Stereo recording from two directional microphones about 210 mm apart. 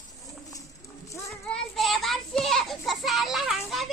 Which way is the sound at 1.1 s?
5° left (ahead or behind).